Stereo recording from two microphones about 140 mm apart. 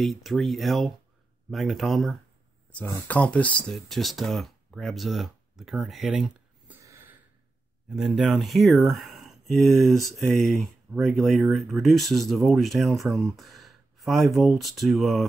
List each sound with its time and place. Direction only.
0.0 s speech: centre (ahead or behind)
2.8 s speech: 10° left (ahead or behind); by 6.8 s 5° right (ahead or behind)
6.8 s a sound: 20° right (ahead or behind)
7.9 s speech: 5° right (ahead or behind)